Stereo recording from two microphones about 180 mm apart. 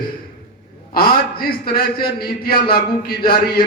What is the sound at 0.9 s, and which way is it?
A man's voice, 55° left (ahead or behind).